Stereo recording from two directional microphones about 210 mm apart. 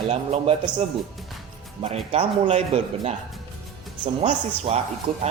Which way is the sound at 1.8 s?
30° right (ahead or behind).